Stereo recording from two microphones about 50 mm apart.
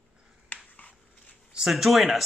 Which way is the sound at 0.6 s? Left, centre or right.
Left.